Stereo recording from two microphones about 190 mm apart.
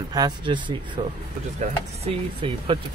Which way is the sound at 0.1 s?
20° right (ahead or behind).